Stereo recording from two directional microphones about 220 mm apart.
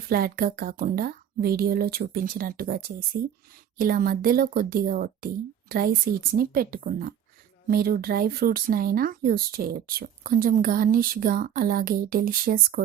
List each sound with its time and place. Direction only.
0.1 s speech: 40° right (ahead or behind)